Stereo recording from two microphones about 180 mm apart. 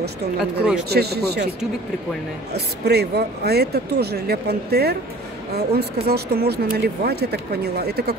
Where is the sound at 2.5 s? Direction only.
65° right (ahead or behind).